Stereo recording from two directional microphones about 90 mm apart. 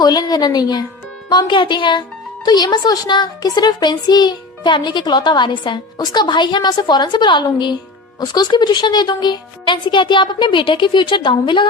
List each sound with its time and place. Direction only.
0.0 s a woman's voice: 50° left (ahead or behind)
1.3 s speech: 60° left (ahead or behind)